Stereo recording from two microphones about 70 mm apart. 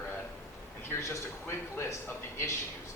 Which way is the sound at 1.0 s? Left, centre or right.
Left.